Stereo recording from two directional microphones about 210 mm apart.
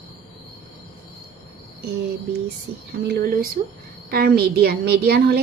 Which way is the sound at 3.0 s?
45° right (ahead or behind).